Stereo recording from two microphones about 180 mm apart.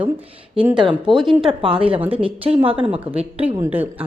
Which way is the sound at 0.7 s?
25° right (ahead or behind).